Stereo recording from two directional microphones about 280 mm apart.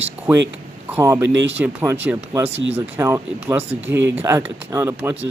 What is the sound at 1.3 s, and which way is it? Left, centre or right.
Speech, right.